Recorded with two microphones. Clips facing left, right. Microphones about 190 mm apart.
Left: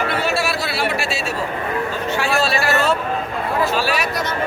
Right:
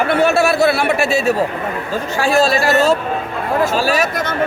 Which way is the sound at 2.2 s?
40° right (ahead or behind).